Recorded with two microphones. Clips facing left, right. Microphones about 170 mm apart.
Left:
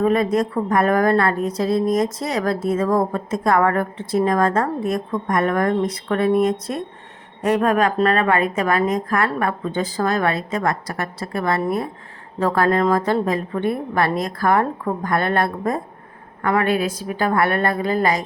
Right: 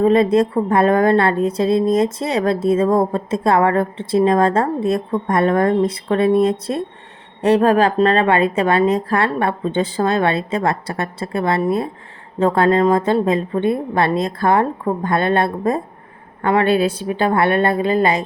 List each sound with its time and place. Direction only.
0.0 s a woman's voice: 25° right (ahead or behind)